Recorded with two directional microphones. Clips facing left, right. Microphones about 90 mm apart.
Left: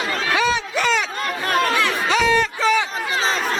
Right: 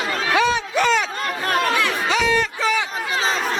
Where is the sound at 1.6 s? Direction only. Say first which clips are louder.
Left 2 dB; 10° right (ahead or behind).